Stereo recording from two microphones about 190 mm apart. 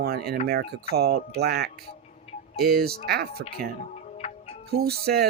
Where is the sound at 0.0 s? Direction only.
55° right (ahead or behind).